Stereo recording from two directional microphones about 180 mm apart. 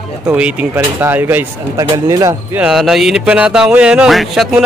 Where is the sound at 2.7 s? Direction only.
Centre (ahead or behind).